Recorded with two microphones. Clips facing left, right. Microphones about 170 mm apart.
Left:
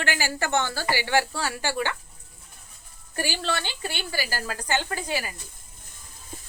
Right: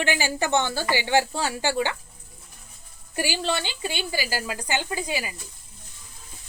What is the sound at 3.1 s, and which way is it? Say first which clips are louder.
Speech: right 2 dB; 15° right (ahead or behind).